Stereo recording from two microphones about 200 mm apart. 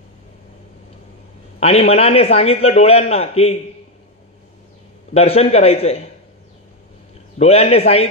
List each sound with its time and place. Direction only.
1.6 s a man's voice: 30° left (ahead or behind)
5.1 s speech: 30° left (ahead or behind)
7.3 s speech: 30° left (ahead or behind)